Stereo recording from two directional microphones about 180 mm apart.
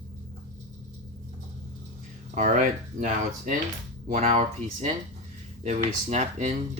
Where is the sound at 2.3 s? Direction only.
45° right (ahead or behind).